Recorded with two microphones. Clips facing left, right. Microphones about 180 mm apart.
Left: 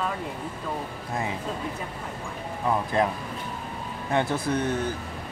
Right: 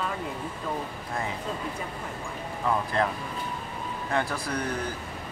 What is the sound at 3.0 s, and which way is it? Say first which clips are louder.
Speech: left 3 dB; 15° left (ahead or behind).